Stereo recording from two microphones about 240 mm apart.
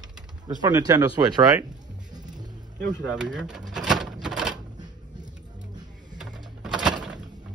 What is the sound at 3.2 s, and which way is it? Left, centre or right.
Speech, centre.